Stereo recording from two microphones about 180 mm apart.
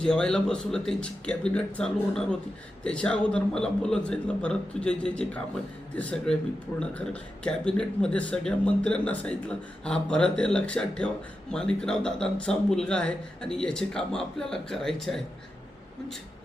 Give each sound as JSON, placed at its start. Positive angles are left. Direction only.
{"t": 0.0, "sound": "a man's voice", "side_deg": 5}